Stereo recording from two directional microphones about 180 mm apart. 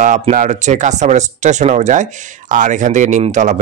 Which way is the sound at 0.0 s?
45° right (ahead or behind).